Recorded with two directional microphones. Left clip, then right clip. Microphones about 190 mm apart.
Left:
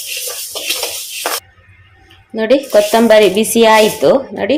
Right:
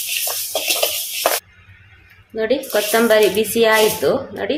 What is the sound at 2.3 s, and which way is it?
A woman's voice, 35° left (ahead or behind).